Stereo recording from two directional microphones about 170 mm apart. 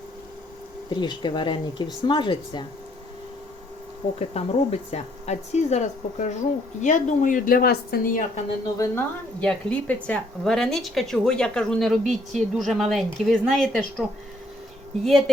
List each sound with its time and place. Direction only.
0.9 s speech: 25° left (ahead or behind)
4.2 s speech: 35° left (ahead or behind); by 8.2 s 60° left (ahead or behind)
8.8 s a woman's voice: 10° left (ahead or behind)